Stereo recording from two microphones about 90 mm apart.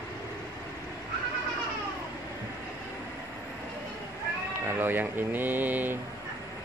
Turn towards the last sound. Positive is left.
turn(degrees=-20)  # may be behind; listen again after turning